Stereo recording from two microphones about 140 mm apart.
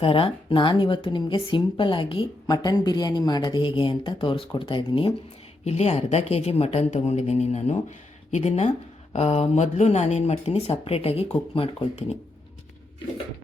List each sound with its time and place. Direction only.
0.0 s speech: 40° left (ahead or behind)
5.6 s speech: 50° left (ahead or behind)